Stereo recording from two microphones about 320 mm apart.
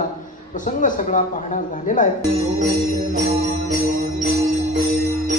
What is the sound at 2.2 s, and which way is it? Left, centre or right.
Music, centre.